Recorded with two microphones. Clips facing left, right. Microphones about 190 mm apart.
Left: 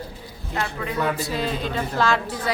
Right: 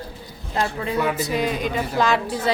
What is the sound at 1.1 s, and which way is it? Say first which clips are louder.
A woman's voice: right 3 dB; 20° right (ahead or behind).